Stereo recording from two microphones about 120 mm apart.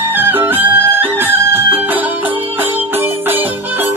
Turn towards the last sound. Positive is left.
turn(degrees=-20)  # may be behind; listen again after turning